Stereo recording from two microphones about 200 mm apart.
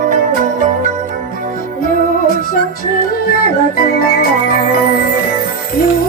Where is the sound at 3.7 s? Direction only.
50° left (ahead or behind).